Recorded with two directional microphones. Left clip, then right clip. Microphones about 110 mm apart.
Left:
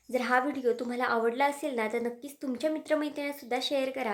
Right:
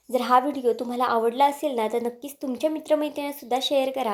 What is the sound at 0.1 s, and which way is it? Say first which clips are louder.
Speech: right 7 dB; 25° right (ahead or behind).